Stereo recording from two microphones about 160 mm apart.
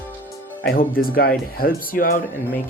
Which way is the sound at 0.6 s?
65° left (ahead or behind).